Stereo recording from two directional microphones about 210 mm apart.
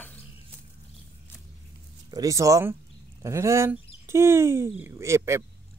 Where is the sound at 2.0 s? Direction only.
15° right (ahead or behind).